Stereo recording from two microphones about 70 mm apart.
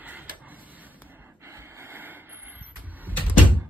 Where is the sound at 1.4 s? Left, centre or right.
Right.